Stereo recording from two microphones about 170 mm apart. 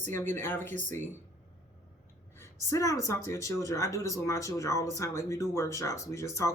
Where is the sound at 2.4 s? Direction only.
20° left (ahead or behind).